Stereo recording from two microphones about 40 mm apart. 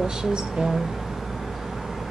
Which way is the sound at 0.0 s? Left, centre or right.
Centre.